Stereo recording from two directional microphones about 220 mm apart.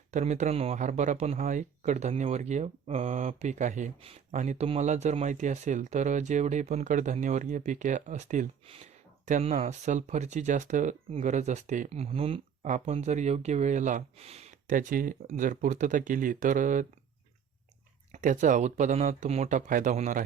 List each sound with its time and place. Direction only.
0.1 s speech: 35° right (ahead or behind)
18.1 s speech: 35° right (ahead or behind)